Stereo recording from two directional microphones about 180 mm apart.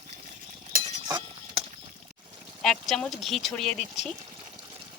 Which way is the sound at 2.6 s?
Centre (ahead or behind).